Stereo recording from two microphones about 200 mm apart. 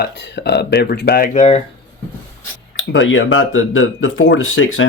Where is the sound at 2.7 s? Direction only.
70° left (ahead or behind).